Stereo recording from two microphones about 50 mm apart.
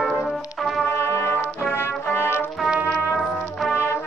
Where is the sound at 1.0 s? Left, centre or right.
Left.